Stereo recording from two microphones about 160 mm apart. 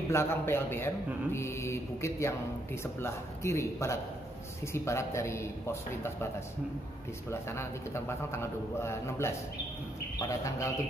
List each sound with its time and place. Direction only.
0.1 s a man's voice: 15° left (ahead or behind)
7.2 s a man's voice: 15° left (ahead or behind)